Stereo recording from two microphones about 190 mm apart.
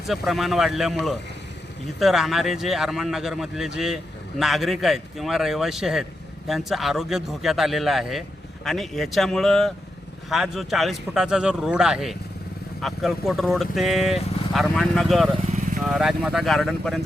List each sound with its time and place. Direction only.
0.1 s speech: centre (ahead or behind)
2.0 s speech: centre (ahead or behind)
15.5 s vehicle: 40° right (ahead or behind)
15.8 s speech: centre (ahead or behind)